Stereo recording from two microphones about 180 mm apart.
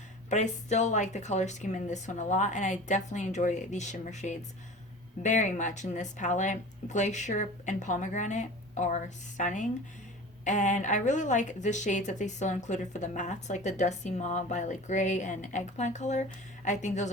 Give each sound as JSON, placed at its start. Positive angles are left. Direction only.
{"t": 0.3, "sound": "a woman's voice", "side_deg": 40}